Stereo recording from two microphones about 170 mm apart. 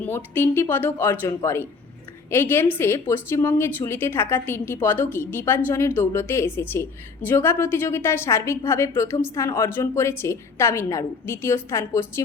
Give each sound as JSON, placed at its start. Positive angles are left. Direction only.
{"t": 0.0, "sound": "a woman's voice", "side_deg": 10}